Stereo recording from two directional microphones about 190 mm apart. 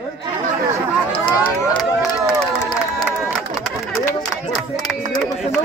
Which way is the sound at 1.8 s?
5° right (ahead or behind).